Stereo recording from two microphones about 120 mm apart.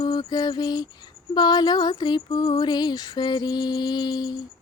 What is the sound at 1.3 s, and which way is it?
Female singing, 35° left (ahead or behind).